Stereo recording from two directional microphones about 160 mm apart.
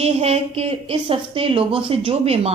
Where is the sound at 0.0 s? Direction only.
40° right (ahead or behind).